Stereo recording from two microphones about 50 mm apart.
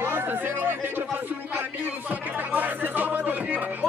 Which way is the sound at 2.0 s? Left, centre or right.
Right.